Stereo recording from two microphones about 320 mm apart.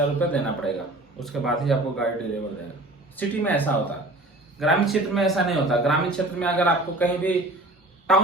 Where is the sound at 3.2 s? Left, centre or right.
Centre.